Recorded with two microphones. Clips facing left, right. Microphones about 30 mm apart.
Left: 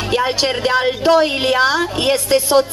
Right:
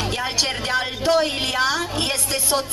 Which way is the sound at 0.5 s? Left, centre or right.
Centre.